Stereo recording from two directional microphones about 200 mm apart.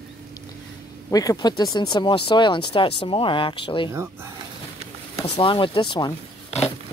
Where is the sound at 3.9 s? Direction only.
15° right (ahead or behind).